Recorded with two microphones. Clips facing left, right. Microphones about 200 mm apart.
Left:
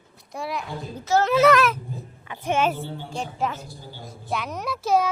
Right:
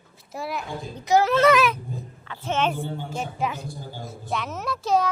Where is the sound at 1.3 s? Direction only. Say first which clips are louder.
Left 1 dB; centre (ahead or behind).